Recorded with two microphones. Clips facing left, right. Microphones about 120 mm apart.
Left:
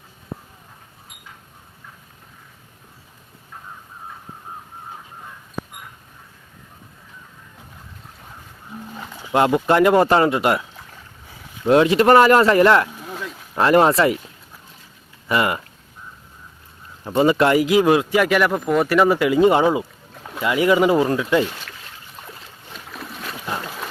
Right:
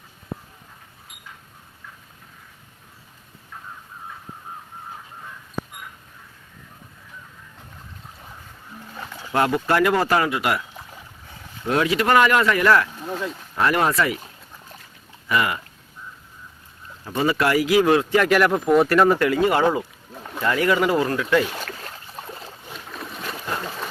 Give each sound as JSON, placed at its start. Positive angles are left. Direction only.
{"t": 9.2, "sound": "speech", "side_deg": 20}
{"t": 11.7, "sound": "speech", "side_deg": 30}
{"t": 15.3, "sound": "speech", "side_deg": 30}
{"t": 17.0, "sound": "speech", "side_deg": 20}
{"t": 19.3, "sound": "speech", "side_deg": 20}
{"t": 19.8, "sound": "speech", "side_deg": 5}
{"t": 21.6, "sound": "boat", "side_deg": -45}
{"t": 22.7, "sound": "boat", "side_deg": 0}